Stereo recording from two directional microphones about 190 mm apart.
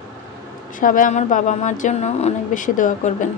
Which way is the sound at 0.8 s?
45° left (ahead or behind).